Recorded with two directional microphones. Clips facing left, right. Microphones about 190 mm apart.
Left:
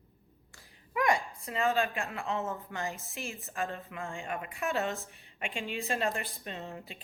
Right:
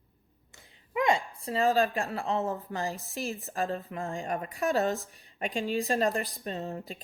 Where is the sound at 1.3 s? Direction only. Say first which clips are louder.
Right 4 dB; 35° right (ahead or behind).